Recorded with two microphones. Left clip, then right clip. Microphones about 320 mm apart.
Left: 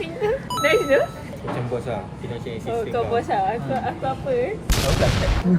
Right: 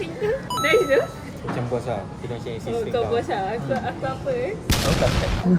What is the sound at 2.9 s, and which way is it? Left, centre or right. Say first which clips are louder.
Speech: left 2 dB; centre.